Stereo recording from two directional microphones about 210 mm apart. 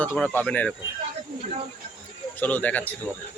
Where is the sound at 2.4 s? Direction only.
10° left (ahead or behind).